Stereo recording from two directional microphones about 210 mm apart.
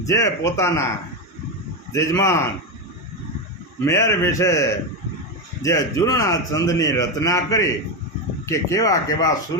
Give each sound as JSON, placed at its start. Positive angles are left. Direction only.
{"t": 0.0, "sound": "a man's voice", "side_deg": 15}
{"t": 1.9, "sound": "a man's voice", "side_deg": 15}
{"t": 3.8, "sound": "a man's voice", "side_deg": 15}